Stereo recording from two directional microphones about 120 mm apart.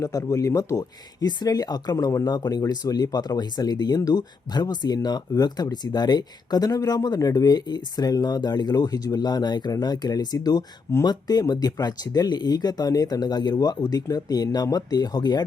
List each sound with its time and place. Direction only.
0.0 s speech: 30° left (ahead or behind)